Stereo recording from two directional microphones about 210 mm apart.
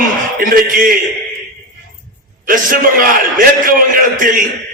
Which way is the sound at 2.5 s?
40° right (ahead or behind).